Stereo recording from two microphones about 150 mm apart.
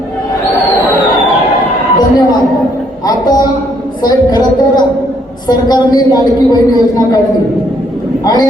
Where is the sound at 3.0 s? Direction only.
25° left (ahead or behind).